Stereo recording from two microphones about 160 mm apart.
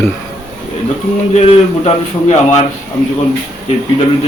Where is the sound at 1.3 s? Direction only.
40° left (ahead or behind).